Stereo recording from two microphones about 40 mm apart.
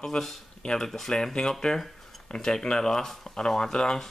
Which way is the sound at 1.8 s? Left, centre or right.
Centre.